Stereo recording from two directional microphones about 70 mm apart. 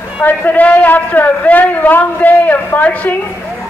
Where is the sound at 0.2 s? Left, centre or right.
Left.